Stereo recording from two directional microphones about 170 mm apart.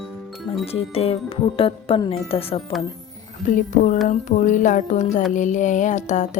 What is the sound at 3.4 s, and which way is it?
Speech, 50° left (ahead or behind).